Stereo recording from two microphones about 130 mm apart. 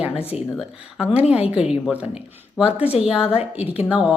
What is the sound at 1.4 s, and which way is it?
A woman's voice, 5° right (ahead or behind).